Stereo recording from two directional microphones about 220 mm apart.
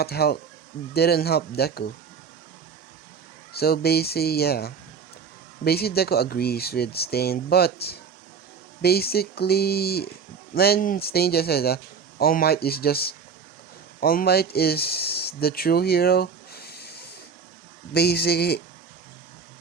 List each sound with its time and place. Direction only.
0.0 s speech: 45° left (ahead or behind)
3.5 s speech: 45° left (ahead or behind)
17.9 s speech: 45° left (ahead or behind)